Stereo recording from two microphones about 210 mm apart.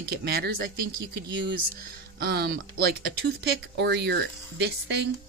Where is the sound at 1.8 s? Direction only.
50° right (ahead or behind).